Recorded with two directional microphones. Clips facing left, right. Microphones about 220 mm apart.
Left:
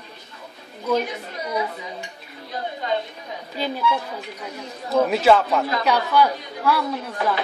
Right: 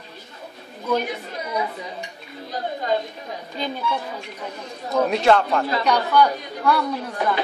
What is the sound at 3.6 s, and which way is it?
A woman's voice, 5° left (ahead or behind).